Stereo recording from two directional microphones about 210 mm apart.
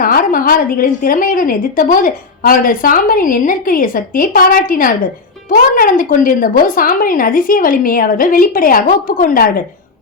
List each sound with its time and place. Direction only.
0.0 s a woman's voice: 40° left (ahead or behind)